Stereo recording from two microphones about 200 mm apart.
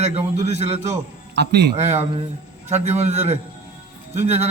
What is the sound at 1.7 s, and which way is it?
A man's voice, 35° right (ahead or behind).